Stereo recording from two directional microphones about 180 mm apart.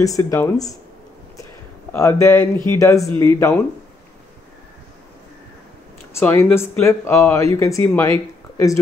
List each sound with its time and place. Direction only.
0.0 s speech: 20° left (ahead or behind)
1.9 s speech: 15° left (ahead or behind)
6.1 s speech: 10° left (ahead or behind)